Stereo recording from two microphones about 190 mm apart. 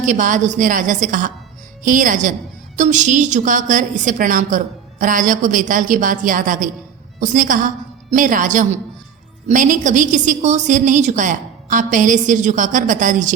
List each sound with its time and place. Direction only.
0.0 s a woman's voice: 40° right (ahead or behind)